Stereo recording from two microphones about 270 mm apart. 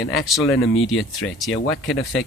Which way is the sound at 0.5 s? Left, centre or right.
Left.